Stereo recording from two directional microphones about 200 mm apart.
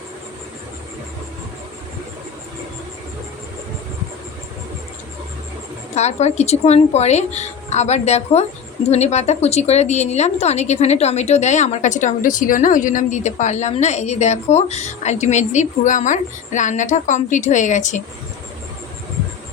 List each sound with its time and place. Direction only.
5.9 s a woman's voice: 35° left (ahead or behind)